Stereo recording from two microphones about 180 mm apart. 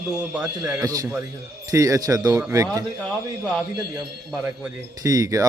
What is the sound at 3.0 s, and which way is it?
Speech, centre (ahead or behind).